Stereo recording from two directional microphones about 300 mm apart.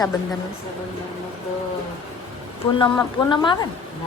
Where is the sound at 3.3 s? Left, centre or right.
Centre.